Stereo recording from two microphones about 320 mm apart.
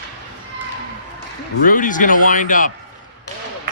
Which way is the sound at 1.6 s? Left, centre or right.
Left.